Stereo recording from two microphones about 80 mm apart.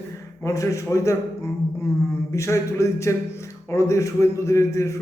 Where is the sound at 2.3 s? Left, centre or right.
Left.